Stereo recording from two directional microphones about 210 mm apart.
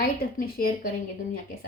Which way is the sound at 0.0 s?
45° left (ahead or behind).